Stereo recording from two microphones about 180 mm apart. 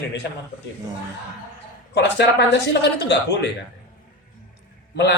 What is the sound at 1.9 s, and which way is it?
A man's voice, 70° left (ahead or behind).